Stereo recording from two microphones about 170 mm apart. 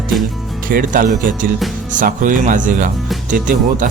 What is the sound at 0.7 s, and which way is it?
Speech, 55° right (ahead or behind).